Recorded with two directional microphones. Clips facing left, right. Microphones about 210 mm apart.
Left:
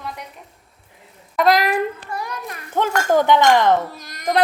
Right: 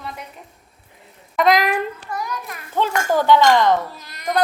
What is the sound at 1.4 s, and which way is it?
Speech, centre (ahead or behind).